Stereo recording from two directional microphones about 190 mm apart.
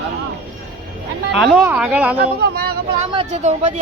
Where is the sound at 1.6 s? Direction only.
5° right (ahead or behind).